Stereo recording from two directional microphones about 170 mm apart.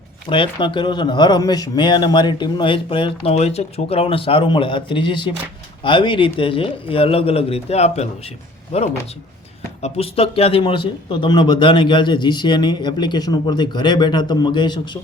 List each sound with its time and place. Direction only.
0.3 s speech: 30° left (ahead or behind)